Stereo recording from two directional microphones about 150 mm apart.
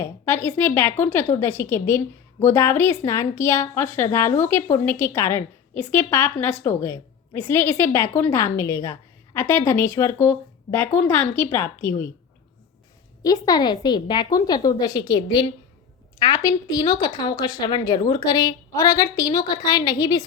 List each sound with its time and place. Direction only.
0.4 s a woman's voice: 15° left (ahead or behind)
13.2 s speech: 25° left (ahead or behind)